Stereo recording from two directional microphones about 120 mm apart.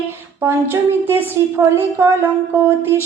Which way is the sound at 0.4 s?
20° right (ahead or behind).